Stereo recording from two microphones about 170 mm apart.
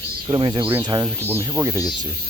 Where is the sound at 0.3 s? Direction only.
25° right (ahead or behind).